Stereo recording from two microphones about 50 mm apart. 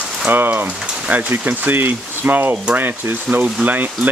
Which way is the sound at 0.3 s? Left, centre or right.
Right.